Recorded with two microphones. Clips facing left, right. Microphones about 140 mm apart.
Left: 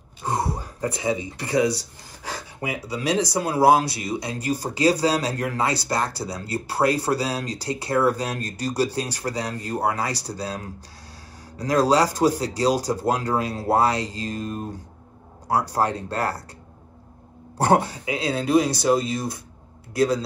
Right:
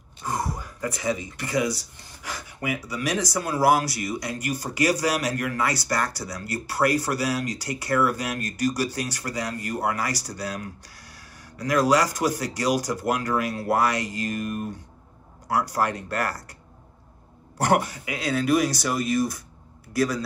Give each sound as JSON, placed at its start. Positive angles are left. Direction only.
{"t": 0.2, "sound": "speech", "side_deg": 30}
{"t": 17.6, "sound": "speech", "side_deg": 30}